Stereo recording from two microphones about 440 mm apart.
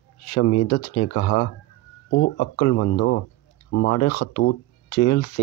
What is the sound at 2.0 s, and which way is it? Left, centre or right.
Speech, left.